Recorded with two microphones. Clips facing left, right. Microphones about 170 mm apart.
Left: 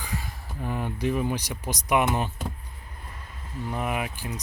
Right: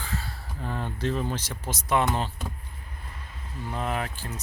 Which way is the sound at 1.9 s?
15° left (ahead or behind).